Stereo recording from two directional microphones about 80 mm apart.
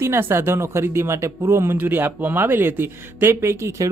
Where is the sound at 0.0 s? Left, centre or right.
Right.